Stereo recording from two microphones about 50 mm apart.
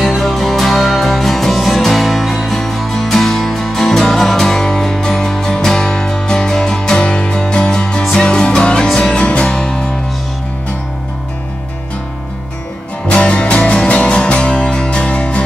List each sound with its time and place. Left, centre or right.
0.2 s music: centre
13.1 s music: left